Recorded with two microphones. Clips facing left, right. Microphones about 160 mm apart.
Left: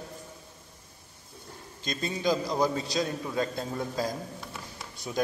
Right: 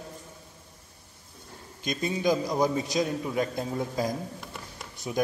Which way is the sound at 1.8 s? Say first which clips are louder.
Right 3 dB; 15° right (ahead or behind).